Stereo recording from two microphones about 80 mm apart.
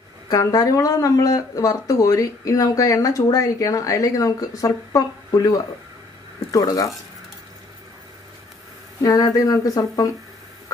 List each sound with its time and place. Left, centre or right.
0.3 s speech: left
9.0 s speech: left